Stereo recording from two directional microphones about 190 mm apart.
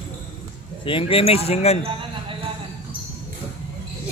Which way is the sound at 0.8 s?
30° left (ahead or behind).